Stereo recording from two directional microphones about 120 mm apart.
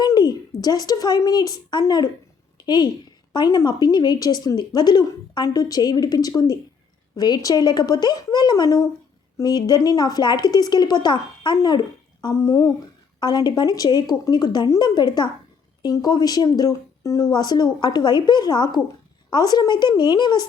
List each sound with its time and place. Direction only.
0.0 s a woman's voice: 35° left (ahead or behind)
12.2 s speech: 25° left (ahead or behind)
13.1 s speech: 35° left (ahead or behind)